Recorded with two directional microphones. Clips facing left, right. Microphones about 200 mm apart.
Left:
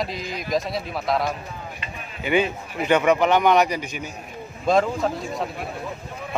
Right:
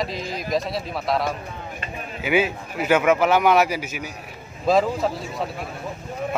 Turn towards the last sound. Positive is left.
turn(degrees=-5)  # may be behind; listen again after turning